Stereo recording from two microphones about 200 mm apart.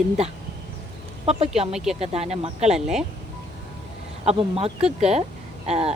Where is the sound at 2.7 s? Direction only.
Centre (ahead or behind).